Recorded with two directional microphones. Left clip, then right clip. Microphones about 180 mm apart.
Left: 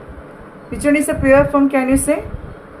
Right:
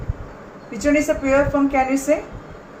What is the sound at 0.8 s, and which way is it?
A woman's voice, 50° left (ahead or behind).